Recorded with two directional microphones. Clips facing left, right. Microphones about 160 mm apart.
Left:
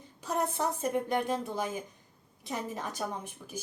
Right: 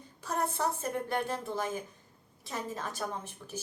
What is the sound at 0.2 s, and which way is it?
A woman's voice, 15° left (ahead or behind).